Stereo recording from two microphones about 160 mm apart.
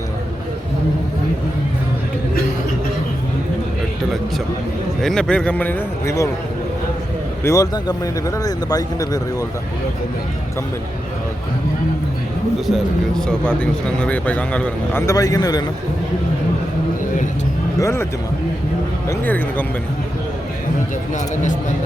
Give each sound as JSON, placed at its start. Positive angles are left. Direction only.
{"t": 4.9, "sound": "speech", "side_deg": 5}
{"t": 7.4, "sound": "speech", "side_deg": 20}
{"t": 12.5, "sound": "speech", "side_deg": 0}
{"t": 15.0, "sound": "speech", "side_deg": 20}
{"t": 17.7, "sound": "speech", "side_deg": 20}
{"t": 19.0, "sound": "speech", "side_deg": 10}